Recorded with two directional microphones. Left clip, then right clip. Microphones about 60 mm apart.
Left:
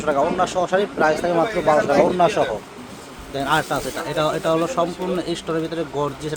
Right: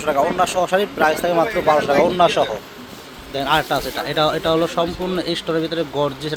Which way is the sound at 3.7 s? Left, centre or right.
Right.